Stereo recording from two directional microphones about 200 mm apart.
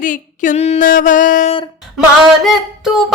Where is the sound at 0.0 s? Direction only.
40° left (ahead or behind).